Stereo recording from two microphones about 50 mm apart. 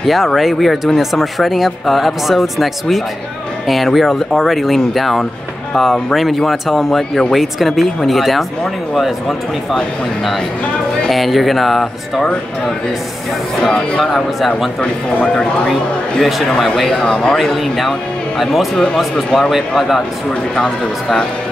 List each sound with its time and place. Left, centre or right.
0.0 s speech: centre
11.1 s speech: centre
13.6 s speech: centre
15.2 s speech: centre
15.7 s speech: centre
17.0 s speech: centre
17.4 s speech: centre
20.5 s speech: centre